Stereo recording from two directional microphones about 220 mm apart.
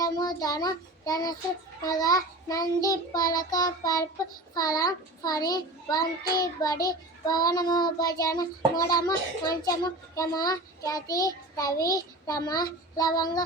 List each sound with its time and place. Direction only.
0.0 s a child's voice: 15° left (ahead or behind)
1.8 s child singing: 15° left (ahead or behind)